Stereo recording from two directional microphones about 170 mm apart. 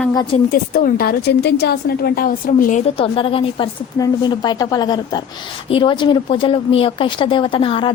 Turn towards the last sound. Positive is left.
turn(degrees=30)  # may be behind; listen again after turning